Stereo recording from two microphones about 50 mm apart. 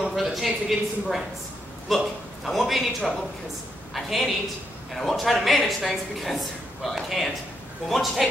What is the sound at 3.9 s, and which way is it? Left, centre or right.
A woman's voice, centre.